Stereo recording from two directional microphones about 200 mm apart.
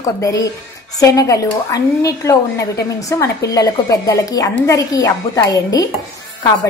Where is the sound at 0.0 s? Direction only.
15° left (ahead or behind).